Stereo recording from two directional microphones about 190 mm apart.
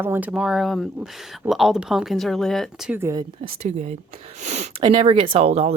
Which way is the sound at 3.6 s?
40° right (ahead or behind).